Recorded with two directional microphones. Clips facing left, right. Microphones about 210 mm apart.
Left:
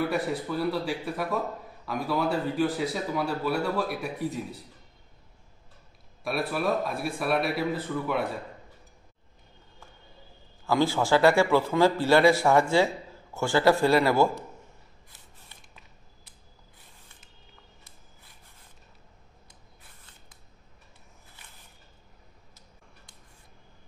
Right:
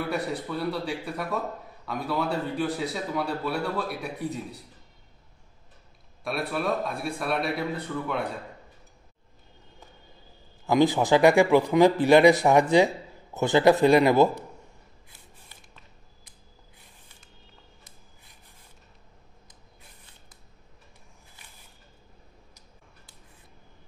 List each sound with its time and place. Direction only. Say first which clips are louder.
0.0 s speech: left 2 dB; centre (ahead or behind)
6.2 s speech: left 1 dB; centre (ahead or behind)
10.6 s a man's voice: right 3 dB; 20° right (ahead or behind)